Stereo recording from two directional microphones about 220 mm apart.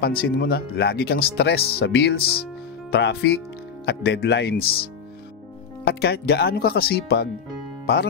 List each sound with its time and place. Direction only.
0.0 s speech: 45° left (ahead or behind)
5.9 s speech: 45° left (ahead or behind)